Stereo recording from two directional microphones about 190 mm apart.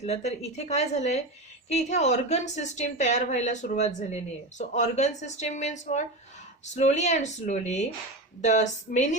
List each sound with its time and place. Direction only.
0.0 s speech: 35° left (ahead or behind)